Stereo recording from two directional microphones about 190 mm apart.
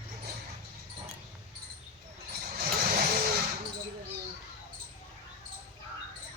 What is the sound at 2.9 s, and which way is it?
Vehicle, 50° right (ahead or behind).